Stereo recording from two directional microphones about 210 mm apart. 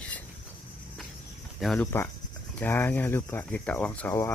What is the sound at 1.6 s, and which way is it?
Speech, 5° left (ahead or behind).